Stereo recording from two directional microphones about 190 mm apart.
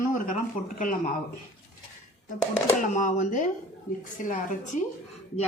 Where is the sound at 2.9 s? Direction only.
40° left (ahead or behind).